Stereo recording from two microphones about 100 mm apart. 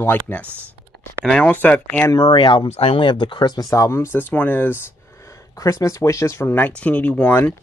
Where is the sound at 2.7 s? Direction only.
75° left (ahead or behind); by 7.5 s 15° left (ahead or behind).